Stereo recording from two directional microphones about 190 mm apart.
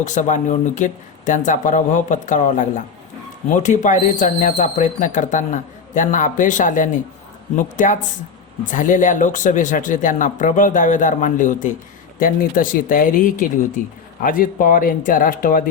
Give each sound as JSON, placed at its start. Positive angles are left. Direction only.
{"t": 0.0, "sound": "speech", "side_deg": 40}